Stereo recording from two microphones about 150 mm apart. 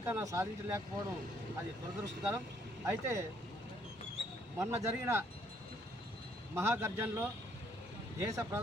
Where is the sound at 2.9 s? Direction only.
20° right (ahead or behind).